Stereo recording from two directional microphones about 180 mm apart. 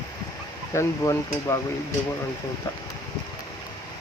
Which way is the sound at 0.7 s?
15° left (ahead or behind).